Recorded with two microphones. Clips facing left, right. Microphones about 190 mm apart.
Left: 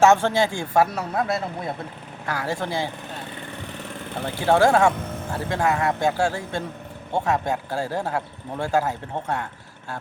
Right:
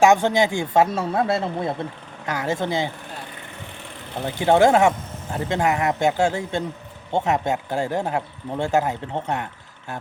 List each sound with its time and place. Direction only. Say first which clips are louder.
0.0 s speech: right 1 dB; 15° right (ahead or behind)
4.4 s speech: right 2 dB; 20° right (ahead or behind)